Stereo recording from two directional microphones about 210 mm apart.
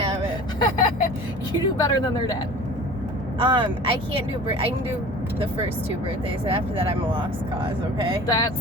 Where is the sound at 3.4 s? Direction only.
25° right (ahead or behind).